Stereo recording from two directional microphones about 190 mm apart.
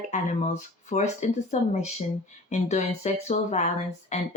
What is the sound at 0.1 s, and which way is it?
Speech, 40° left (ahead or behind).